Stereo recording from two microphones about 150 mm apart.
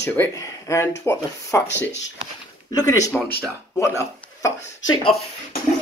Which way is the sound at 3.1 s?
15° left (ahead or behind).